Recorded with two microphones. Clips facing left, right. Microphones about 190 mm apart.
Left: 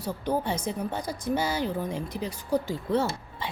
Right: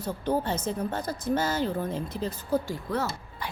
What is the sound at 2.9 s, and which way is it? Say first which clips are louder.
Speech: left 5 dB; 25° left (ahead or behind).